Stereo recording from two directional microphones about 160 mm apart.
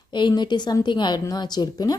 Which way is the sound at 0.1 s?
30° left (ahead or behind).